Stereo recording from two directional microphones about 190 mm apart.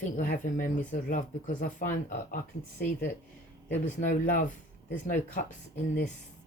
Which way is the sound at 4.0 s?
40° left (ahead or behind).